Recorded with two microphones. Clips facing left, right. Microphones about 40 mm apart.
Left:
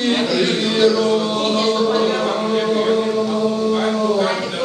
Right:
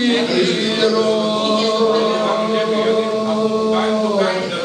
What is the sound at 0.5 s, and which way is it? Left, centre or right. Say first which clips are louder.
Music: left 1 dB; centre.